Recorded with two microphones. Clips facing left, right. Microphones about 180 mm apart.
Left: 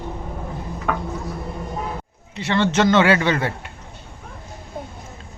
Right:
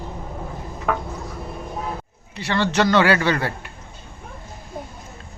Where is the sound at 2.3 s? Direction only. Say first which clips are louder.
Left 2 dB; 25° left (ahead or behind).